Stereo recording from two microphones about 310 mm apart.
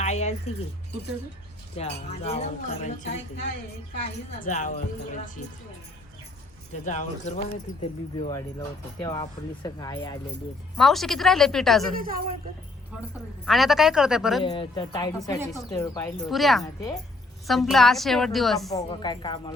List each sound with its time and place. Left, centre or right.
0.0 s a sound: left
1.7 s speech: centre
6.8 s speech: left
8.2 s speech: centre
10.8 s a woman's voice: centre
11.9 s a woman's voice: right
13.4 s a woman's voice: centre
14.4 s speech: centre
16.3 s a woman's voice: centre
16.6 s speech: centre
17.4 s a woman's voice: centre
18.7 s speech: centre